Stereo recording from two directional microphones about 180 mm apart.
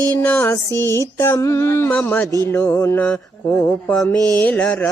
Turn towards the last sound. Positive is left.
turn(degrees=10)  # may be behind; listen again after turning